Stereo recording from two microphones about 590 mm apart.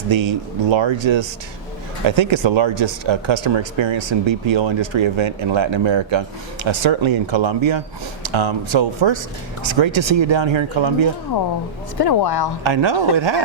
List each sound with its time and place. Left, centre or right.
0.1 s speech: right
11.9 s speech: left
12.6 s speech: right